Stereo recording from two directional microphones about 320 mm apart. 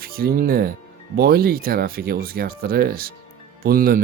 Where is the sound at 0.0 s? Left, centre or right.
Right.